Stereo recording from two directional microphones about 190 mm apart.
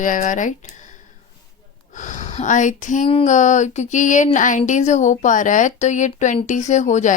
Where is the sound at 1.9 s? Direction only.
40° left (ahead or behind).